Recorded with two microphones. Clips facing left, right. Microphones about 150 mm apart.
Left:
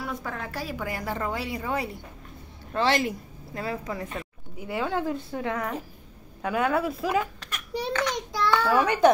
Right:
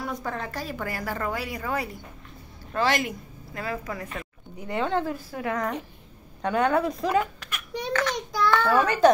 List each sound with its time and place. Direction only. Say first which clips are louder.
0.0 s a woman's voice: right 2 dB; centre (ahead or behind)
0.9 s a woman's voice: even; 20° left (ahead or behind)
4.6 s a woman's voice: right 2 dB; 5° left (ahead or behind)
7.3 s a sound: left 2 dB; 35° left (ahead or behind)
7.9 s child singing: right 3 dB; 20° left (ahead or behind)
8.6 s speech: even; 10° left (ahead or behind)